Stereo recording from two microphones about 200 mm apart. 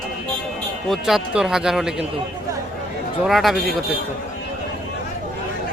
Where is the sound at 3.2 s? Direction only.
Centre (ahead or behind).